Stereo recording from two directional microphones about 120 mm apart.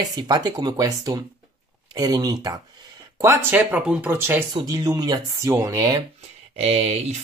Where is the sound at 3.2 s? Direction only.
20° right (ahead or behind).